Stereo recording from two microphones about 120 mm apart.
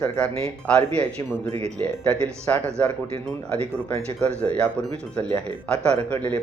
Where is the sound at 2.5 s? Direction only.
20° left (ahead or behind).